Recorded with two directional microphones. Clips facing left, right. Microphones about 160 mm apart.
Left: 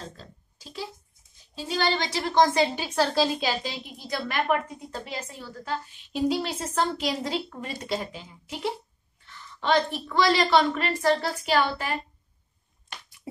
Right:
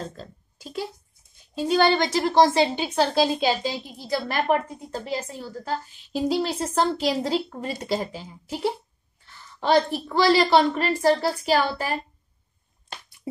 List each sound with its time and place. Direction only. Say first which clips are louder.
0.2 s a woman's voice: right 7 dB; 55° right (ahead or behind)
2.3 s a woman's voice: right 2 dB; 30° right (ahead or behind)